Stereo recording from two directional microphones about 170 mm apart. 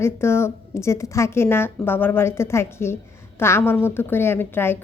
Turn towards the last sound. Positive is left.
turn(degrees=15)  # may be behind; listen again after turning